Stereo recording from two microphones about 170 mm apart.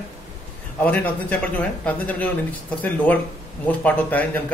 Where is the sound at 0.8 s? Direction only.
10° left (ahead or behind).